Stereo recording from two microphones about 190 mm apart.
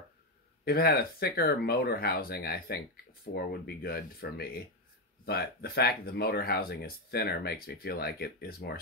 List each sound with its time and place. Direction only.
0.7 s speech: 55° left (ahead or behind)